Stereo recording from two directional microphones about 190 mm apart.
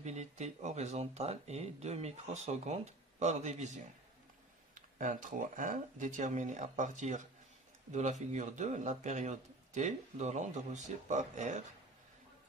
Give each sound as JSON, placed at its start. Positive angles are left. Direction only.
{"t": 0.0, "sound": "speech", "side_deg": -35}
{"t": 4.7, "sound": "speech", "side_deg": -45}